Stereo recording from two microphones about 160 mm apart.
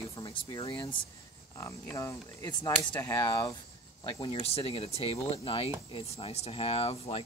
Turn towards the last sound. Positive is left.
turn(degrees=35)  # may be behind; listen again after turning